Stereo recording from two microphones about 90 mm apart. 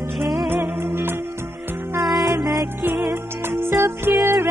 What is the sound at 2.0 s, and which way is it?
Music, centre (ahead or behind).